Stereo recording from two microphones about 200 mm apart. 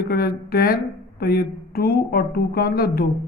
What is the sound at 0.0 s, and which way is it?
A man's voice, 50° left (ahead or behind).